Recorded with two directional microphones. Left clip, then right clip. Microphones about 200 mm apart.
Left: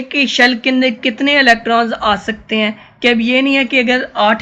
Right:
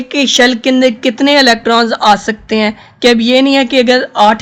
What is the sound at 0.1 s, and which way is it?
Speech, 50° right (ahead or behind).